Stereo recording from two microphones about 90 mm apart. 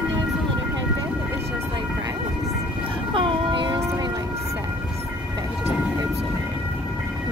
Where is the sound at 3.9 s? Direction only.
45° right (ahead or behind).